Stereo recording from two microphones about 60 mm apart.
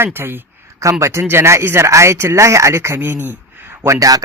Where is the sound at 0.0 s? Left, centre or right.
Right.